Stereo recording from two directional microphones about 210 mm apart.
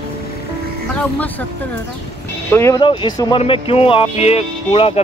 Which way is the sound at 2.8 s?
25° left (ahead or behind).